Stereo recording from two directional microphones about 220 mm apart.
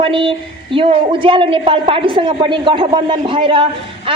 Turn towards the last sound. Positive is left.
turn(degrees=-20)  # may be behind; listen again after turning